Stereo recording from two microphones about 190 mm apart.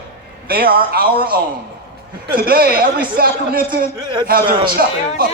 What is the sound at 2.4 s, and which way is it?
Speech, 50° right (ahead or behind).